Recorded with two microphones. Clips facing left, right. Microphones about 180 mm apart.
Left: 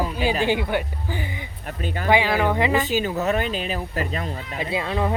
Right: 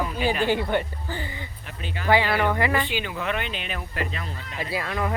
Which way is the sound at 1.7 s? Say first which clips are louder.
Left 6 dB; 45° left (ahead or behind).